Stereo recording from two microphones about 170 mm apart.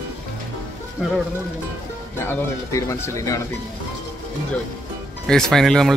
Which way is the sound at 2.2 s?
15° left (ahead or behind).